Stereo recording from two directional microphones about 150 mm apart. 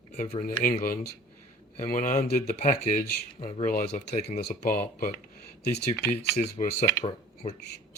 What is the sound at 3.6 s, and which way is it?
Speech, 60° left (ahead or behind).